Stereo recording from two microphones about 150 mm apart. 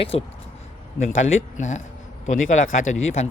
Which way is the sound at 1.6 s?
55° left (ahead or behind).